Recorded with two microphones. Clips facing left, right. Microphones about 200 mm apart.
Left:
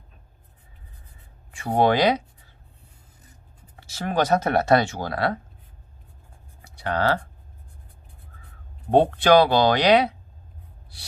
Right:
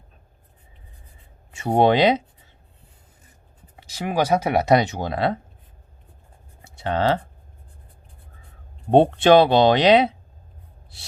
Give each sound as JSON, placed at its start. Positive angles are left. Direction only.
{"t": 1.5, "sound": "speech", "side_deg": -25}
{"t": 3.8, "sound": "speech", "side_deg": -15}
{"t": 6.6, "sound": "writing", "side_deg": -25}
{"t": 8.9, "sound": "speech", "side_deg": -25}